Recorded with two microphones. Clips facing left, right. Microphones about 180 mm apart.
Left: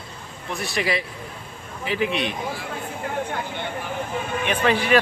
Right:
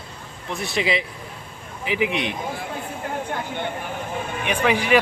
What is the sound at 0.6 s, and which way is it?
A man's voice, 20° right (ahead or behind).